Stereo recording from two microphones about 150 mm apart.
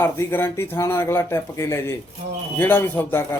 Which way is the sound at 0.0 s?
15° left (ahead or behind).